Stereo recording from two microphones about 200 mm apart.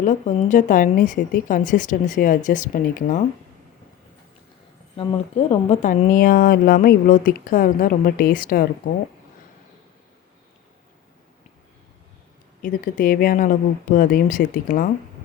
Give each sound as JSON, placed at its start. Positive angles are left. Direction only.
{"t": 0.0, "sound": "a woman's voice", "side_deg": 35}
{"t": 4.9, "sound": "speech", "side_deg": 25}
{"t": 12.6, "sound": "speech", "side_deg": 45}